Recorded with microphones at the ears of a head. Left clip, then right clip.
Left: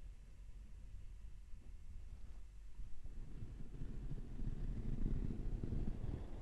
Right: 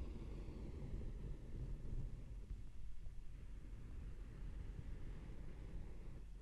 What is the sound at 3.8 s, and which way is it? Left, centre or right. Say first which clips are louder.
Vehicle: left 9 dB; left.